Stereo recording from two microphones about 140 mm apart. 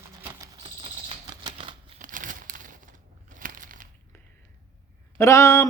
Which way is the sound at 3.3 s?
75° right (ahead or behind).